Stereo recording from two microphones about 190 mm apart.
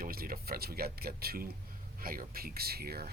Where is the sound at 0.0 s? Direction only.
50° right (ahead or behind).